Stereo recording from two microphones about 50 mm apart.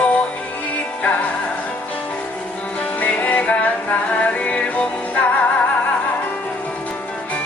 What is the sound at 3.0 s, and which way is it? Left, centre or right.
Music, left.